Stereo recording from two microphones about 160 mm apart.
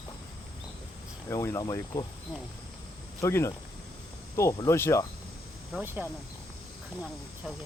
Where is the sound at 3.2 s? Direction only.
20° left (ahead or behind).